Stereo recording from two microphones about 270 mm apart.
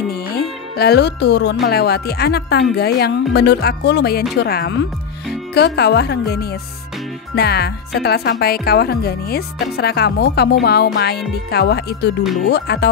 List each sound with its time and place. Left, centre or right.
0.1 s speech: left